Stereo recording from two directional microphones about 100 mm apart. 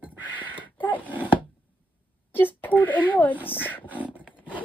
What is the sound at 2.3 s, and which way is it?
Wail, 20° left (ahead or behind).